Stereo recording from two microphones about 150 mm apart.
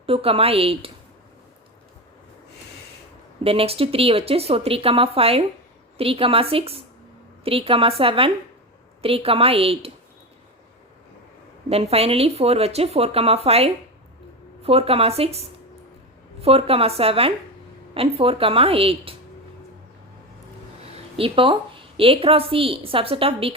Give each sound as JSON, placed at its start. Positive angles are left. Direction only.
{"t": 0.0, "sound": "speech", "side_deg": -40}
{"t": 3.4, "sound": "speech", "side_deg": -40}
{"t": 11.7, "sound": "speech", "side_deg": -40}
{"t": 16.4, "sound": "speech", "side_deg": -40}
{"t": 20.9, "sound": "a woman's voice", "side_deg": -35}